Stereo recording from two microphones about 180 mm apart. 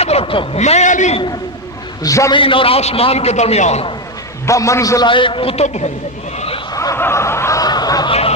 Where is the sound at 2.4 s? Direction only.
30° left (ahead or behind).